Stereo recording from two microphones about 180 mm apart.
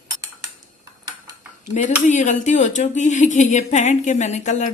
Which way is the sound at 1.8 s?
45° left (ahead or behind).